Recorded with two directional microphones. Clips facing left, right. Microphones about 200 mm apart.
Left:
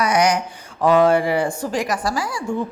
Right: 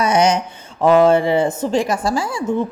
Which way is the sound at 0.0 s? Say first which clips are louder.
Right 2 dB; 25° right (ahead or behind).